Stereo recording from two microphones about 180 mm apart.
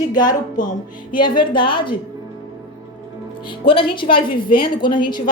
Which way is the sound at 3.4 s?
30° left (ahead or behind).